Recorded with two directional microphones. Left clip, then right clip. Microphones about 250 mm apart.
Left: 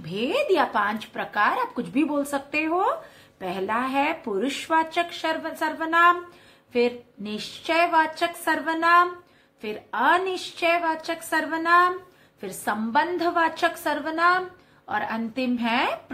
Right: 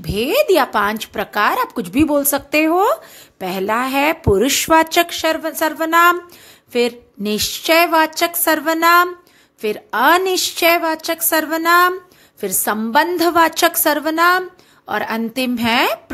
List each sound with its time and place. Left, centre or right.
0.0 s speech: right